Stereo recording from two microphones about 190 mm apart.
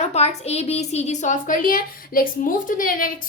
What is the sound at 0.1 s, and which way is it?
A woman's voice, 35° left (ahead or behind).